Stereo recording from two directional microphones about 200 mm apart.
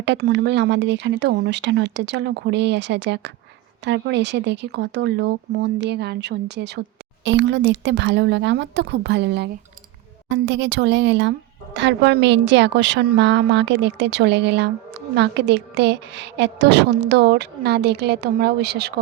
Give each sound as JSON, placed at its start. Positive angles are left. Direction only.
{"t": 0.0, "sound": "speech", "side_deg": -60}